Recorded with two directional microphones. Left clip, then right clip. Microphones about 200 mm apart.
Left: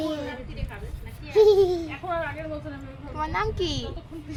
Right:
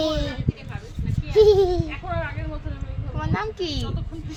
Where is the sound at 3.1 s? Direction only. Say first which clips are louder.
Left 1 dB; 5° right (ahead or behind).